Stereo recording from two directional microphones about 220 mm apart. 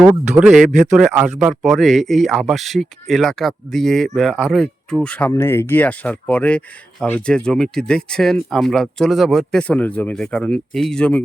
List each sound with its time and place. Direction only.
0.3 s speech: centre (ahead or behind)
0.7 s speech: 35° right (ahead or behind)
0.9 s speech: 5° right (ahead or behind)